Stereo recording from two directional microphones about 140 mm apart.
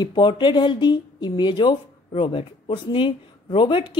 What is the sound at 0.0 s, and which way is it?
Speech, 35° left (ahead or behind).